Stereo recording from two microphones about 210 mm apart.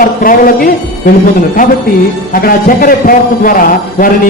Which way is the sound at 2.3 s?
45° left (ahead or behind).